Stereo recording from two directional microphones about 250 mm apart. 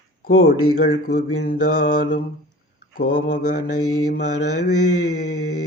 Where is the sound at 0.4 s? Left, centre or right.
Left.